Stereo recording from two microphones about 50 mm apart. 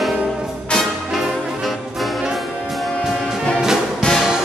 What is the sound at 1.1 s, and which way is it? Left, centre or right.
Music, centre.